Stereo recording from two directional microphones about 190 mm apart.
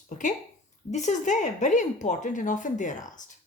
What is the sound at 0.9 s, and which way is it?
A woman's voice, 40° left (ahead or behind).